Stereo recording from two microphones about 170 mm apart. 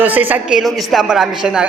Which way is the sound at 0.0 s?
10° right (ahead or behind).